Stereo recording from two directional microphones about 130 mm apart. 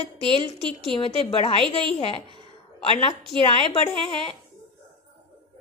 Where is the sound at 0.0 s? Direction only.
45° left (ahead or behind).